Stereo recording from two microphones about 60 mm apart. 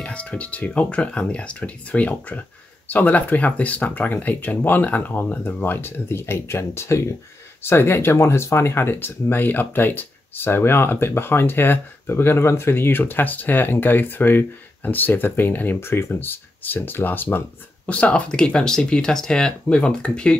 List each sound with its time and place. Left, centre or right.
0.0 s speech: left
15.8 s speech: left
17.8 s speech: left